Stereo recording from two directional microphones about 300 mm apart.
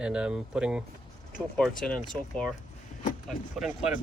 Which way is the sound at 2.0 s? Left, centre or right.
Centre.